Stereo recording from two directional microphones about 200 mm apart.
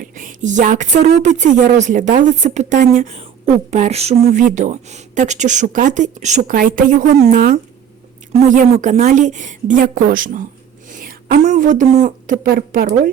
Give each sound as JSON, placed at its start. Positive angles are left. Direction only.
{"t": 0.1, "sound": "a woman's voice", "side_deg": -40}